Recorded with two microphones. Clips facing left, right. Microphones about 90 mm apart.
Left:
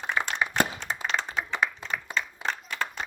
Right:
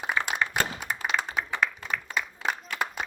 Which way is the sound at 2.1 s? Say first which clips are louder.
Right 1 dB; 10° right (ahead or behind).